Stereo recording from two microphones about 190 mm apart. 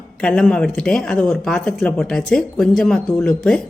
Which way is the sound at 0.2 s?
5° left (ahead or behind).